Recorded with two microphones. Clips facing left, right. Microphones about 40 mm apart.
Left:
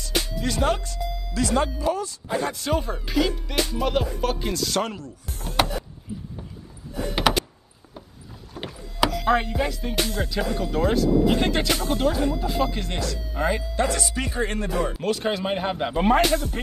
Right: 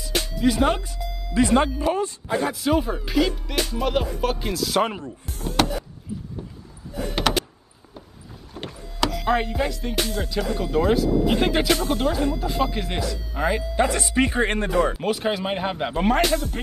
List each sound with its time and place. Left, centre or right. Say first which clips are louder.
0.0 s music: right 4 dB; centre
1.3 s speech: right 5 dB; right
2.4 s music: right 5 dB; centre
4.8 s speech: right 4 dB; right
5.6 s a sound: right 1 dB; centre
8.5 s speech: left 2 dB; centre
11.8 s music: even; centre
12.3 s speech: even; centre
13.8 s speech: right 4 dB; right
15.0 s music: right 1 dB; centre